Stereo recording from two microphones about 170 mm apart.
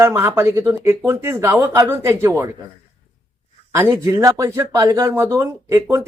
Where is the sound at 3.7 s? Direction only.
15° right (ahead or behind).